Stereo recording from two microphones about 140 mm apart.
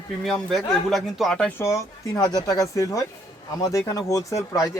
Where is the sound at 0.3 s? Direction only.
Centre (ahead or behind).